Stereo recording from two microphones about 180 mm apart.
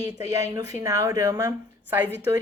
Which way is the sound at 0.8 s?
15° right (ahead or behind).